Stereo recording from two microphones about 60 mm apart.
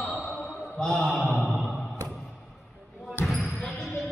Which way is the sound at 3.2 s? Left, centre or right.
Left.